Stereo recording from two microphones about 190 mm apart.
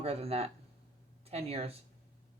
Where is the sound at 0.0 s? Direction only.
30° right (ahead or behind).